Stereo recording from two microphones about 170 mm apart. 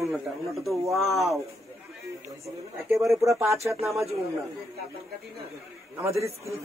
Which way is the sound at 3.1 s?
20° right (ahead or behind).